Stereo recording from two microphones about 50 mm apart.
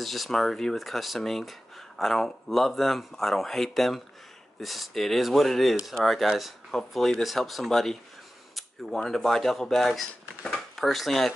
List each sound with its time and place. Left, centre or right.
0.0 s speech: centre